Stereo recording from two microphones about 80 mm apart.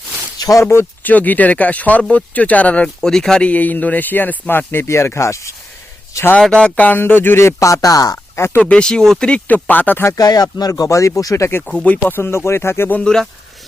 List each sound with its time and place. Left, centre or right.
0.3 s a sound: left
0.6 s speech: left
1.1 s speech: left
6.4 s speech: centre; by 8.2 s left
8.4 s speech: left
8.6 s speech: centre
10.1 s speech: left
11.6 s speech: centre
11.9 s speech: left
13.0 s speech: centre